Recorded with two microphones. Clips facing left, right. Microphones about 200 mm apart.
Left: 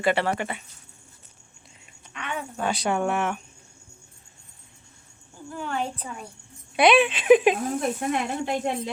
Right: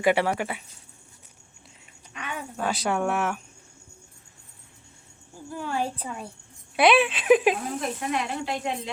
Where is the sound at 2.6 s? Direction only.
Centre (ahead or behind).